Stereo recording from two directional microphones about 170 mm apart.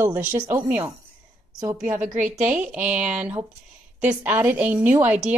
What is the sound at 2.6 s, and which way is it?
Speech, 10° right (ahead or behind).